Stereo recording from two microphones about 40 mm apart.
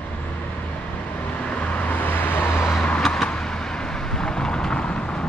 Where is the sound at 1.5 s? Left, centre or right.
Left.